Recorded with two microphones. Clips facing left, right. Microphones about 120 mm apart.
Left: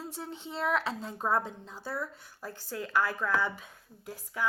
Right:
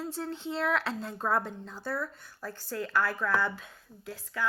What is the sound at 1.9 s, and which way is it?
Speech, 20° left (ahead or behind).